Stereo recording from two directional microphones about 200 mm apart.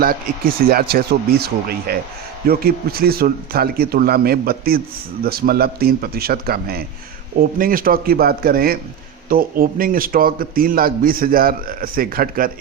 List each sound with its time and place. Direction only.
0.0 s a man's voice: 45° right (ahead or behind)